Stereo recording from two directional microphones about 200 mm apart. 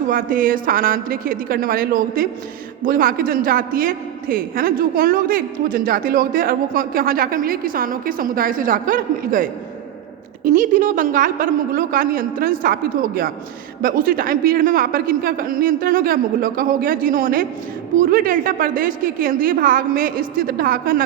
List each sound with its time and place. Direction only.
0.1 s a woman's voice: 45° right (ahead or behind)